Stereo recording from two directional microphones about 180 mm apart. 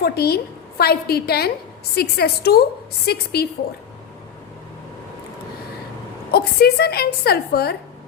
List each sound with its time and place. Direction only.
0.0 s a woman's voice: 60° left (ahead or behind)
6.3 s a woman's voice: 60° left (ahead or behind)